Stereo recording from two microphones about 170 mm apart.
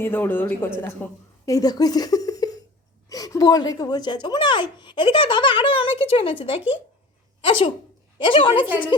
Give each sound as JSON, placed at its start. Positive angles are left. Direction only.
{"t": 0.0, "sound": "speech", "side_deg": 10}
{"t": 1.5, "sound": "speech", "side_deg": 20}